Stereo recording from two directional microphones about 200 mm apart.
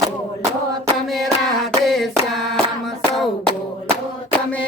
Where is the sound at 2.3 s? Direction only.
Centre (ahead or behind).